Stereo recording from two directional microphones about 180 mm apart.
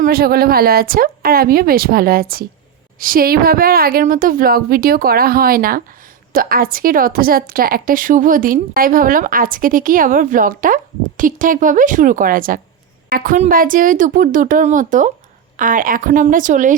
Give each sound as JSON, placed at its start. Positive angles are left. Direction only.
{"t": 0.0, "sound": "a woman's voice", "side_deg": -55}